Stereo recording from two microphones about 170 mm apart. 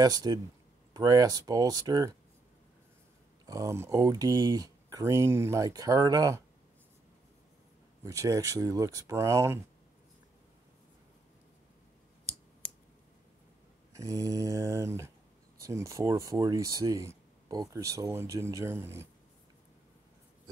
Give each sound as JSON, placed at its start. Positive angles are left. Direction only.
{"t": 0.0, "sound": "speech", "side_deg": -25}
{"t": 3.4, "sound": "speech", "side_deg": -20}
{"t": 8.0, "sound": "speech", "side_deg": -20}
{"t": 13.9, "sound": "speech", "side_deg": -20}